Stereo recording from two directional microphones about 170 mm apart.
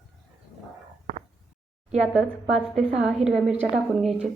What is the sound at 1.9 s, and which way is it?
A woman's voice, 5° right (ahead or behind).